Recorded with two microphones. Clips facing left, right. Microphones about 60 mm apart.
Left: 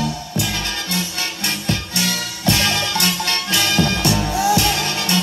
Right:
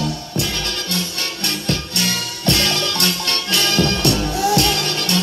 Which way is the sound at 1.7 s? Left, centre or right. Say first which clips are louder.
Even; right.